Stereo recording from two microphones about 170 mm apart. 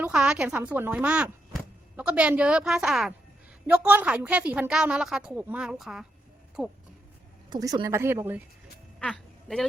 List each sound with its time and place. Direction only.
0.0 s a woman's voice: 5° right (ahead or behind)
7.5 s a woman's voice: 25° right (ahead or behind)
9.0 s a woman's voice: 5° left (ahead or behind)